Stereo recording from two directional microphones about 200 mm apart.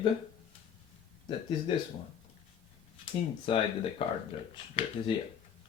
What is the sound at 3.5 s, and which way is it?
Speech, 25° left (ahead or behind).